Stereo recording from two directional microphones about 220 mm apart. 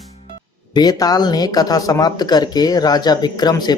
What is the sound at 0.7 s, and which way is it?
Speech, 15° left (ahead or behind).